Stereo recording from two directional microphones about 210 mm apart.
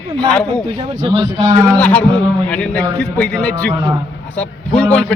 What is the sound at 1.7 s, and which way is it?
Speech, 5° left (ahead or behind).